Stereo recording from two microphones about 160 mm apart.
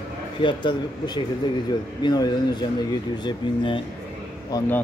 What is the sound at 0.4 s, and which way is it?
Speech, 30° left (ahead or behind).